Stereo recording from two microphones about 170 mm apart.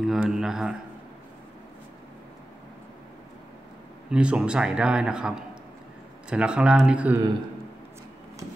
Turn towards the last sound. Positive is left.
turn(degrees=-10)  # may be behind; listen again after turning